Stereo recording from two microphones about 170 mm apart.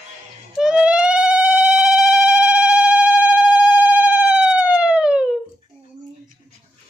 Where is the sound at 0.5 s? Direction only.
5° right (ahead or behind).